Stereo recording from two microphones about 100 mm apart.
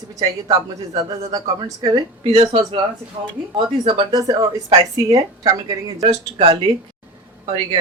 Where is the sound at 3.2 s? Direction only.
55° right (ahead or behind).